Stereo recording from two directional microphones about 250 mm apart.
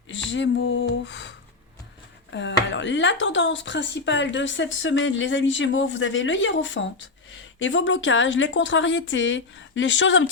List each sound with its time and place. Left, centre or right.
0.1 s speech: left
2.3 s speech: left